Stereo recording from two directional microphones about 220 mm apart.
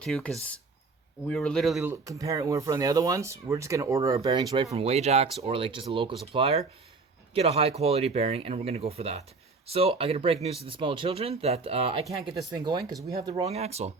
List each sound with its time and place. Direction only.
0.0 s speech: 5° left (ahead or behind); by 13.9 s 30° right (ahead or behind)